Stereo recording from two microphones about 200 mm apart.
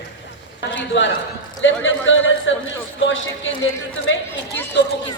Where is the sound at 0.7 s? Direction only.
65° left (ahead or behind).